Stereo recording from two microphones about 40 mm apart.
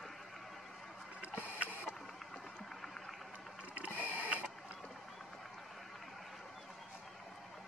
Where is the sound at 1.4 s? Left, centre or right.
Right.